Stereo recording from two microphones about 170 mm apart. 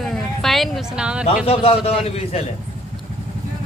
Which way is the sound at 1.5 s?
35° left (ahead or behind).